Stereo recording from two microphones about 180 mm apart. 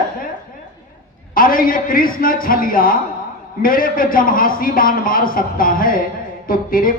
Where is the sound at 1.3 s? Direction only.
50° left (ahead or behind).